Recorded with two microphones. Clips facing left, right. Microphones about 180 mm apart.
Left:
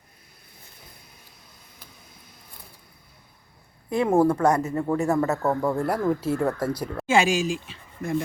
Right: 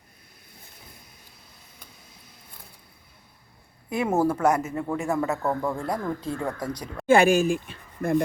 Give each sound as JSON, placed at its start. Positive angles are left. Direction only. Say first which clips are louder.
{"t": 3.8, "sound": "speech", "louder": "left 3 dB", "side_deg": -10}
{"t": 7.1, "sound": "speech", "louder": "right 4 dB", "side_deg": -55}